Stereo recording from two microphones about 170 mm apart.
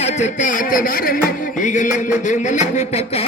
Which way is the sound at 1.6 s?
50° left (ahead or behind).